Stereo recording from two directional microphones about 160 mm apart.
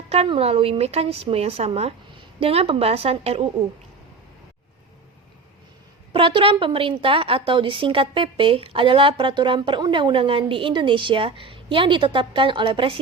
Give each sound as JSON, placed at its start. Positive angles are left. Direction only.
{"t": 0.1, "sound": "a woman's voice", "side_deg": -40}
{"t": 6.1, "sound": "a woman's voice", "side_deg": -35}